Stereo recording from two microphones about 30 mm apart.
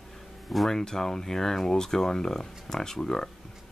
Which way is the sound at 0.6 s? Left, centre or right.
Centre.